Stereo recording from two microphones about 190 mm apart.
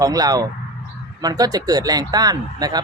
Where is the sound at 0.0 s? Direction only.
20° right (ahead or behind).